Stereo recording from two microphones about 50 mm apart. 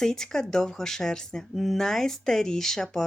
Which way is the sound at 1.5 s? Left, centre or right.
Centre.